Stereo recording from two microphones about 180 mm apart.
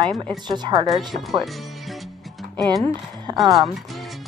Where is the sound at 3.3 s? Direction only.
25° right (ahead or behind).